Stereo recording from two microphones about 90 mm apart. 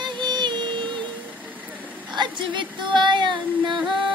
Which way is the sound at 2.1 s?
60° right (ahead or behind).